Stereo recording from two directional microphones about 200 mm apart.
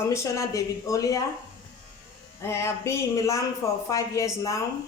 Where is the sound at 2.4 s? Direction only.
15° left (ahead or behind).